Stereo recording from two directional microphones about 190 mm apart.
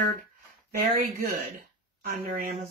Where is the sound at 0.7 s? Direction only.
50° right (ahead or behind).